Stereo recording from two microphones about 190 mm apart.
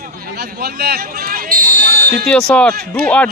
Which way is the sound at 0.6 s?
55° right (ahead or behind).